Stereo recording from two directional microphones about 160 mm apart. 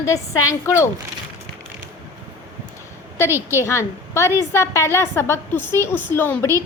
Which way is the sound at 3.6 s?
15° left (ahead or behind).